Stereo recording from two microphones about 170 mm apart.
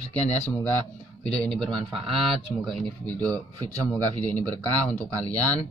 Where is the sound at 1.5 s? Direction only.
5° left (ahead or behind).